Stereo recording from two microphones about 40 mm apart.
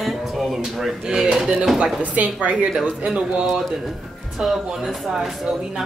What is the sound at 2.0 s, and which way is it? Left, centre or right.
A woman's voice, right.